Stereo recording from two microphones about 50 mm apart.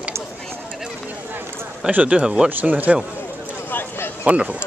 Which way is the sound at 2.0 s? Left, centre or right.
Right.